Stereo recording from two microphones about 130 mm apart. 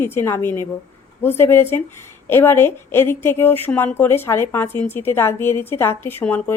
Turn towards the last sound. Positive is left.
turn(degrees=15)  # may be behind; listen again after turning